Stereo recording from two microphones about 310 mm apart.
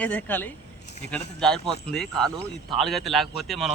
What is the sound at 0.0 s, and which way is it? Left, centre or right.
Speech, centre.